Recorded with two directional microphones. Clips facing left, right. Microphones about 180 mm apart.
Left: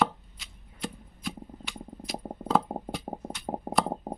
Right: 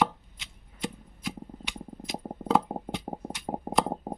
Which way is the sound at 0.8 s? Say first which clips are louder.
Right 2 dB; 20° right (ahead or behind).